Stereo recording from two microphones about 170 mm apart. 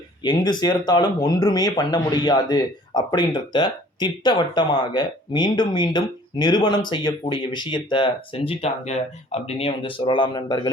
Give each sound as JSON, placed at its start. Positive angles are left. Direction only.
{"t": 0.2, "sound": "speech", "side_deg": 25}